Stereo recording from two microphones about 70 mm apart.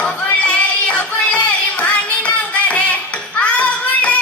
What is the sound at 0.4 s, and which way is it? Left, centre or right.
Music, centre.